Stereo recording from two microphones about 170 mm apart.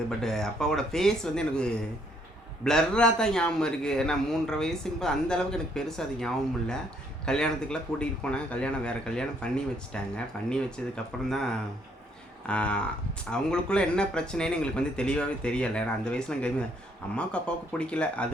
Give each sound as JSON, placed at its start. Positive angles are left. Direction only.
{"t": 0.2, "sound": "a man's voice", "side_deg": 5}
{"t": 12.5, "sound": "a man's voice", "side_deg": 5}